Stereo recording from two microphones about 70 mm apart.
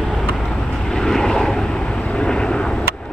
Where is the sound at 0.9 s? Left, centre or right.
Centre.